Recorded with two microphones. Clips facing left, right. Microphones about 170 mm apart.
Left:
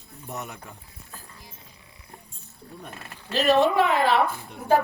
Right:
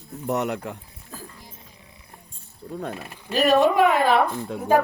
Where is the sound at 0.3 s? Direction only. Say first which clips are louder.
Right 12 dB; 85° right.